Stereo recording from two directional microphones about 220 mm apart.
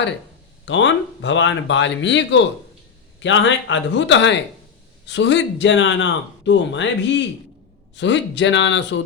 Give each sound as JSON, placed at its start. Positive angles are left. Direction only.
{"t": 0.6, "sound": "speech", "side_deg": 55}